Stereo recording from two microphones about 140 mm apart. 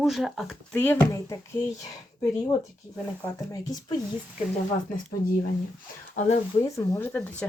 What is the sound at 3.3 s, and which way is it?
Speech, 25° left (ahead or behind).